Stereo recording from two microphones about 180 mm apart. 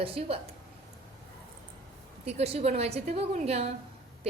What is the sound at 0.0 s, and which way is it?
Speech, 30° right (ahead or behind).